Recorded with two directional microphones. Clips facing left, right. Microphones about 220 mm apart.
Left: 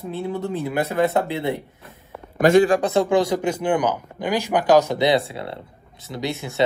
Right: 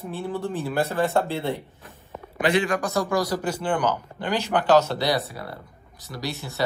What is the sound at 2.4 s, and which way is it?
Speech, 45° left (ahead or behind).